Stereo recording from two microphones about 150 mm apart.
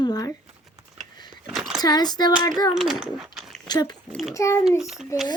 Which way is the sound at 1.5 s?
Centre (ahead or behind).